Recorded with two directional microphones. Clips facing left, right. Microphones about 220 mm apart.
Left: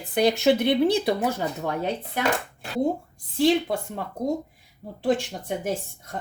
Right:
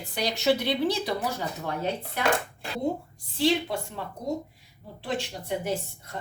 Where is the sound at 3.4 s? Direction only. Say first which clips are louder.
Left 4 dB; 50° left (ahead or behind).